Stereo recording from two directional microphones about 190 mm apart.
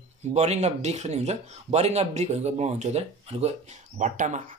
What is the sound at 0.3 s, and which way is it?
Speech, 35° right (ahead or behind).